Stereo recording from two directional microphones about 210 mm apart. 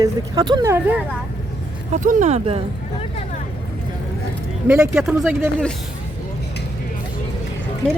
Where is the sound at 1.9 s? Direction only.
35° right (ahead or behind).